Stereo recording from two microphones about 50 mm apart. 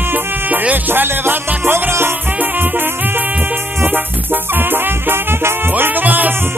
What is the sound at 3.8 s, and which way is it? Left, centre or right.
Music, right.